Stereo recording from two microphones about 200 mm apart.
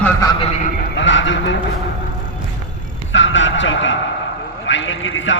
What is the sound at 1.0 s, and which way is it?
Speech, 70° left (ahead or behind).